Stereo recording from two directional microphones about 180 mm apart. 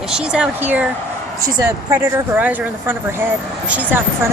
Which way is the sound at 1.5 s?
20° right (ahead or behind).